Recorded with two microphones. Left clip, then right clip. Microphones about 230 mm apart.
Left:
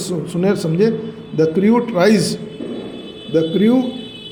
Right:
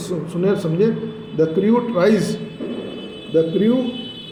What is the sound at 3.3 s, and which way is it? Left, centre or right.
Speech, left.